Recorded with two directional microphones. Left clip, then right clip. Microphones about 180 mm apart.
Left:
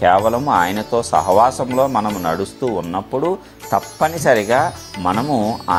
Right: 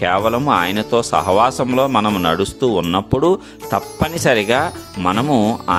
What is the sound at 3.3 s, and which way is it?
Speech, 50° right (ahead or behind).